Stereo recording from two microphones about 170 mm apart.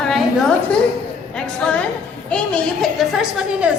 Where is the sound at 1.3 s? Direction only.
5° left (ahead or behind).